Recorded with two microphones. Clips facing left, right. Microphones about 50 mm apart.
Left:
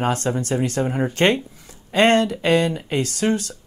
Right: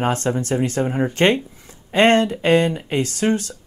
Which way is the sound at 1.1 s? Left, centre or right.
Right.